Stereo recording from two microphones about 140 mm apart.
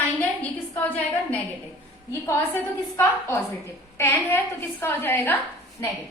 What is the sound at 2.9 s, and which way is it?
A woman's voice, 20° left (ahead or behind).